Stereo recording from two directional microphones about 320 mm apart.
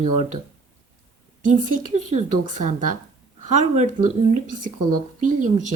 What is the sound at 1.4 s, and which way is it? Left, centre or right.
A woman's voice, right.